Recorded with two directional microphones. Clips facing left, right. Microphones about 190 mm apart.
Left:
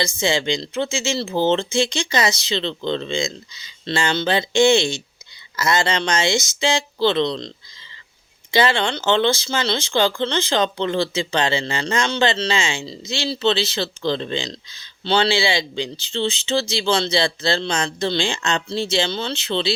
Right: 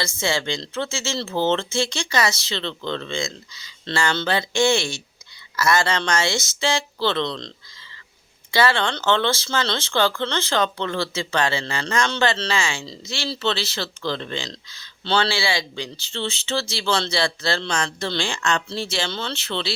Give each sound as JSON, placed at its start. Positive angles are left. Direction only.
{"t": 0.0, "sound": "speech", "side_deg": 15}